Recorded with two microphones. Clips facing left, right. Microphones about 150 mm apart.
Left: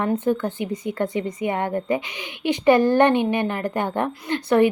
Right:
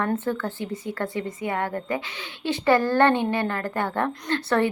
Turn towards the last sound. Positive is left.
turn(degrees=15)  # may be behind; listen again after turning